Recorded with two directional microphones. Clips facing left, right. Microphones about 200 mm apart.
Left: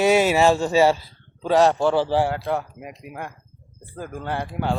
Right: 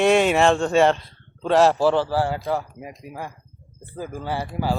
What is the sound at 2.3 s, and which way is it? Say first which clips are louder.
Speech: even; centre (ahead or behind).